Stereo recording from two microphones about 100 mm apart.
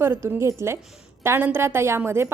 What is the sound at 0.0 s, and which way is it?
A woman's voice, 25° right (ahead or behind).